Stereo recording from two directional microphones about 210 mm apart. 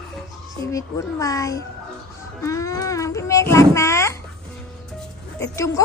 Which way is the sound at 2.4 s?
15° left (ahead or behind).